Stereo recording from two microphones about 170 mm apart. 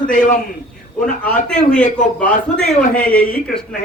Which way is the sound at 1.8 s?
50° left (ahead or behind).